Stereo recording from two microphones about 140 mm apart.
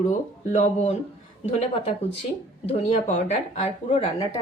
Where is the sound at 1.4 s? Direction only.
45° left (ahead or behind).